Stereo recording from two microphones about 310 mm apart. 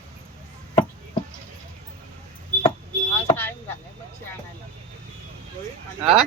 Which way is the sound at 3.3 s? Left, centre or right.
Centre.